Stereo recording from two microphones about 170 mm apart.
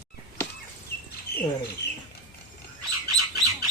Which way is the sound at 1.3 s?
65° left (ahead or behind).